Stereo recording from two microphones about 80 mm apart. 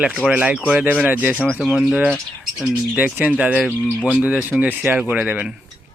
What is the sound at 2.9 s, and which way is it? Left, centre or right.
Speech, centre.